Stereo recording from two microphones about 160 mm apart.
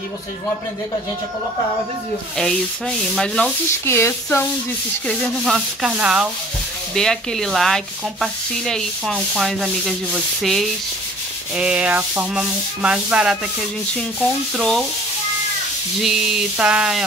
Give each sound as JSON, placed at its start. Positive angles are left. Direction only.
{"t": 3.2, "sound": "sanding", "side_deg": 5}
{"t": 3.8, "sound": "speech", "side_deg": 15}
{"t": 5.0, "sound": "sanding", "side_deg": 0}
{"t": 14.6, "sound": "sanding", "side_deg": 0}
{"t": 16.0, "sound": "sanding", "side_deg": -5}